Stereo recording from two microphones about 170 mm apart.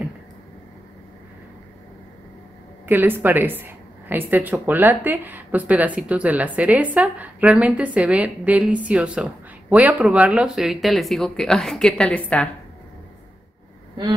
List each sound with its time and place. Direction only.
2.9 s a woman's voice: 10° right (ahead or behind); by 12.4 s 5° left (ahead or behind)